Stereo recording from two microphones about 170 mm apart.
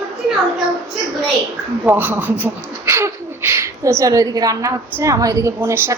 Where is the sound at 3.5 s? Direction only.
15° right (ahead or behind).